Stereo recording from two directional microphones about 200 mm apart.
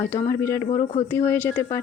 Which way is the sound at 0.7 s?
25° left (ahead or behind).